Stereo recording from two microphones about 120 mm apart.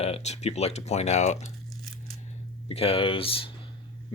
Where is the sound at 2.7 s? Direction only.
55° left (ahead or behind).